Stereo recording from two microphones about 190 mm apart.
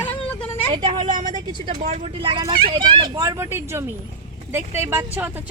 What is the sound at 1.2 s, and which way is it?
Speech, 45° right (ahead or behind).